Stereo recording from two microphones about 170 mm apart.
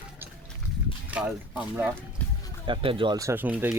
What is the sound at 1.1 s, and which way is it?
Speech, 5° right (ahead or behind).